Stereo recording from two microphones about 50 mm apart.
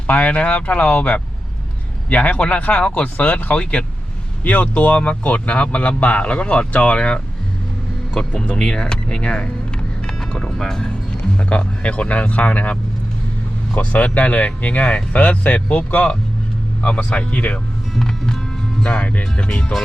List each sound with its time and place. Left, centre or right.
0.1 s speech: left
8.2 s speech: left
11.3 s speech: left
18.8 s speech: left